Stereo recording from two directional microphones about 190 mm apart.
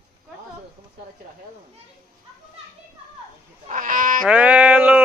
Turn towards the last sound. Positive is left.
turn(degrees=-5)  # may be behind; listen again after turning